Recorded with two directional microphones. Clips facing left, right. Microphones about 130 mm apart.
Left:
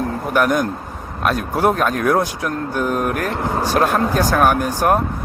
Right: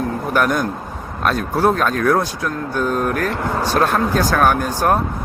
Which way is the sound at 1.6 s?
15° left (ahead or behind).